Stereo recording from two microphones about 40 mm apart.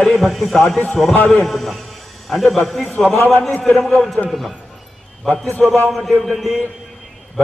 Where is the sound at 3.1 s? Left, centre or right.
Left.